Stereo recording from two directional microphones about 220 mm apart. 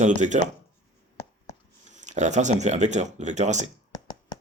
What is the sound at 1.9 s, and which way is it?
Speech, 35° right (ahead or behind).